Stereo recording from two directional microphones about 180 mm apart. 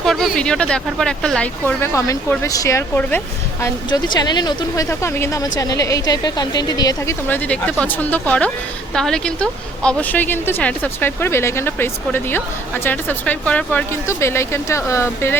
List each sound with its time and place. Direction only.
0.0 s a woman's voice: centre (ahead or behind)